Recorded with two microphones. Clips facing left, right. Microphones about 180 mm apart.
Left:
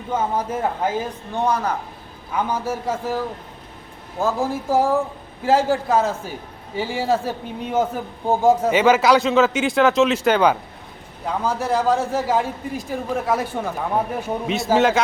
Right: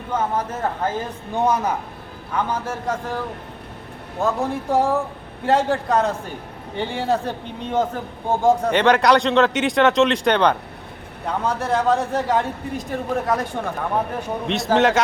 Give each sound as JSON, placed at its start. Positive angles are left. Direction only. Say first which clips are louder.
{"t": 0.1, "sound": "speech", "louder": "left 1 dB", "side_deg": 10}
{"t": 1.4, "sound": "a woman's voice", "louder": "right 1 dB", "side_deg": -15}
{"t": 2.3, "sound": "speech", "louder": "left 1 dB", "side_deg": 10}
{"t": 4.2, "sound": "a man's voice", "louder": "even", "side_deg": 0}